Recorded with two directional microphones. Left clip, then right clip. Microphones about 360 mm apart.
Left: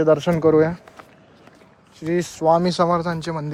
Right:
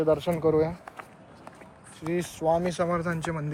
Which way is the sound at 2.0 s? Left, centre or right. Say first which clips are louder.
Left 7 dB; left.